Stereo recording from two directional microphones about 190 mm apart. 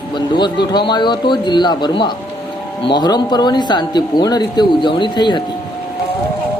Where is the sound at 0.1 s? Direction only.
25° left (ahead or behind).